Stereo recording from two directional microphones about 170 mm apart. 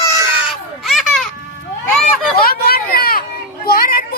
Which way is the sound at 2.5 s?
60° left (ahead or behind).